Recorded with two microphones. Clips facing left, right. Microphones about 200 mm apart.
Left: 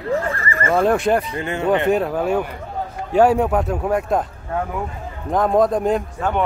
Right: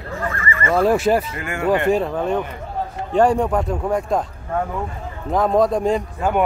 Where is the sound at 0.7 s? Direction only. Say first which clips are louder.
Right 1 dB; centre (ahead or behind).